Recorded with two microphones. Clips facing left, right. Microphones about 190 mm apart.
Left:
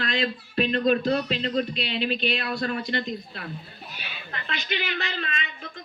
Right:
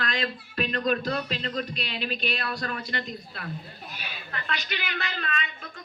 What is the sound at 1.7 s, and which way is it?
Speech, 45° right (ahead or behind).